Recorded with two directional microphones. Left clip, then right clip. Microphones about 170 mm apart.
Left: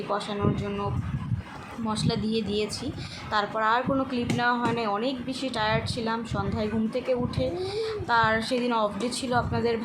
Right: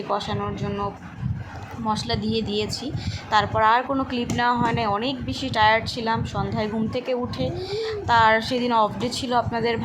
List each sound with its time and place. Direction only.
0.1 s speech: 15° right (ahead or behind)
1.9 s speech: 15° right (ahead or behind)